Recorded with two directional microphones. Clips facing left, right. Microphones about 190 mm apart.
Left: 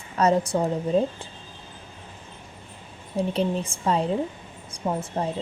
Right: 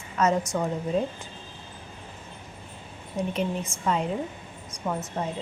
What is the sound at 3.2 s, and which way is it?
A woman's voice, 30° left (ahead or behind).